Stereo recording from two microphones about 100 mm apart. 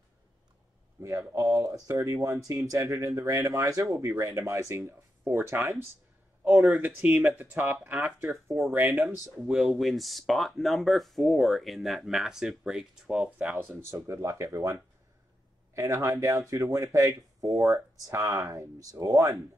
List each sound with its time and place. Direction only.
1.0 s speech: 25° right (ahead or behind)
9.4 s speech: centre (ahead or behind)
13.6 s speech: 25° right (ahead or behind)